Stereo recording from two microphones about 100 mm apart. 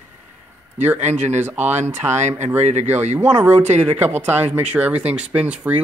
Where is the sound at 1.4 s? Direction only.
20° right (ahead or behind).